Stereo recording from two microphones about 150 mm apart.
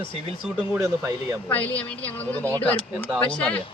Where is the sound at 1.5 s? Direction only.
10° left (ahead or behind).